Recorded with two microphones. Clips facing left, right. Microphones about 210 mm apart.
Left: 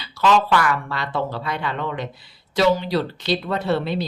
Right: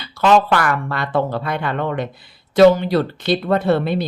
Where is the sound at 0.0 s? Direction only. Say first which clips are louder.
Right 4 dB; 55° right (ahead or behind).